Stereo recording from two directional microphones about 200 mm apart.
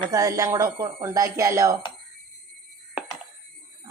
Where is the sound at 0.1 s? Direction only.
15° right (ahead or behind).